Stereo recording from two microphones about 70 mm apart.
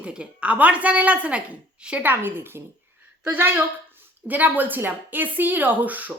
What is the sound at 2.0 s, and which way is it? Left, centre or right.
A woman's voice, right.